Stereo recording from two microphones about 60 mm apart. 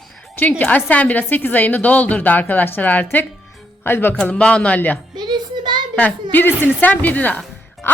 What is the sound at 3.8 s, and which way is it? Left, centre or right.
Speech, left.